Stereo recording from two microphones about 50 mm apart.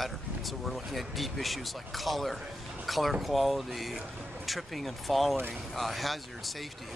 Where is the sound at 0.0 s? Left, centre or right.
Centre.